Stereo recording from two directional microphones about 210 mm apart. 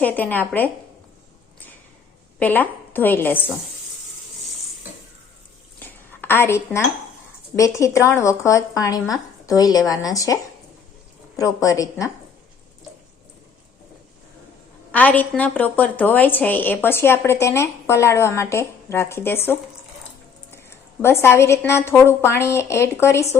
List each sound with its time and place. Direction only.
0.0 s a woman's voice: 10° left (ahead or behind)
2.4 s a woman's voice: 10° left (ahead or behind)
5.8 s a sound: 10° left (ahead or behind)
7.5 s a woman's voice: 15° left (ahead or behind)
11.3 s a woman's voice: 15° left (ahead or behind)
14.9 s a woman's voice: 5° left (ahead or behind)